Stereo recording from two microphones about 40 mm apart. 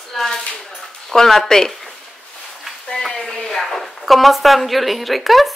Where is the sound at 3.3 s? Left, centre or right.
Centre.